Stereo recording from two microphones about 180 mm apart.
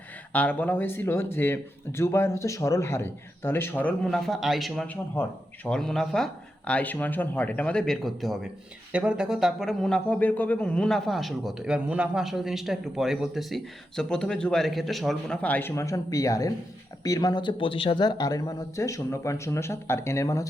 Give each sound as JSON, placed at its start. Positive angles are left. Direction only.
{"t": 0.3, "sound": "speech", "side_deg": 10}